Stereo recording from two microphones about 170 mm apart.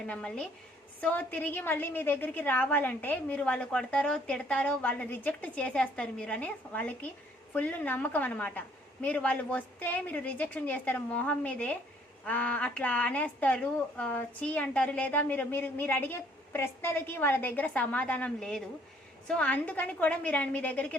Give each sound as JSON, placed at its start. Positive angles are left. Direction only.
{"t": 0.0, "sound": "a woman's voice", "side_deg": 5}